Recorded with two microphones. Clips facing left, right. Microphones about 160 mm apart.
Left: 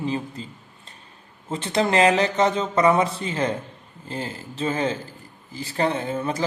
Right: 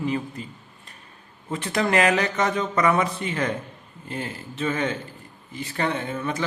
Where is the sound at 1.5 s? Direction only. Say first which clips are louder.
Left 1 dB; 30° left (ahead or behind).